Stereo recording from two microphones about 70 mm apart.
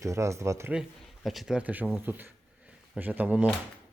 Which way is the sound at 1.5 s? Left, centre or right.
Right.